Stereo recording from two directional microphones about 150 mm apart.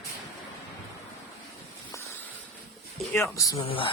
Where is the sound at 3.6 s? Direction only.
35° left (ahead or behind).